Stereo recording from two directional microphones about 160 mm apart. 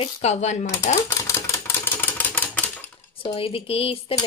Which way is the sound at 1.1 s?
20° left (ahead or behind).